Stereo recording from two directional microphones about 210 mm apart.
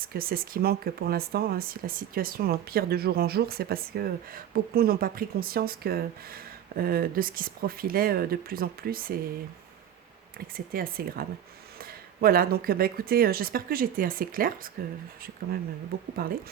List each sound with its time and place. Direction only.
0.0 s speech: 45° right (ahead or behind)
10.3 s speech: 45° right (ahead or behind)